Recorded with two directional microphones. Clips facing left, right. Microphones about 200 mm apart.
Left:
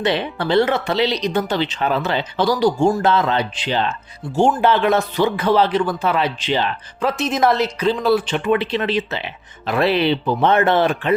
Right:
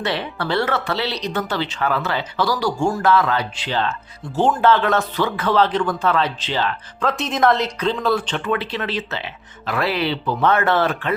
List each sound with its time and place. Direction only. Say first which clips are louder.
0.0 s speech: left 4 dB; 20° left (ahead or behind)
7.0 s a woman's voice: left 1 dB; 5° left (ahead or behind)